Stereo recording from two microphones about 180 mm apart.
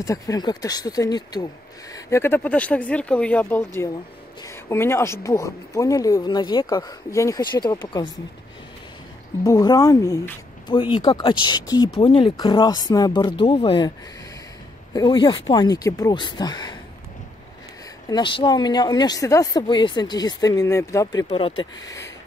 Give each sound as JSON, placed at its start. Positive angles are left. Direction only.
{"t": 0.0, "sound": "speech", "side_deg": 20}
{"t": 9.4, "sound": "speech", "side_deg": 20}
{"t": 15.0, "sound": "speech", "side_deg": 25}
{"t": 18.1, "sound": "speech", "side_deg": 25}
{"t": 21.3, "sound": "speech", "side_deg": 30}